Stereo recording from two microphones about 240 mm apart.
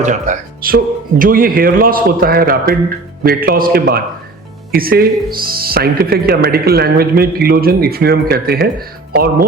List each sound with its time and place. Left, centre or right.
0.0 s speech: right